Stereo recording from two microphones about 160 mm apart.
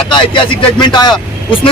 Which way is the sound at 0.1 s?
30° left (ahead or behind).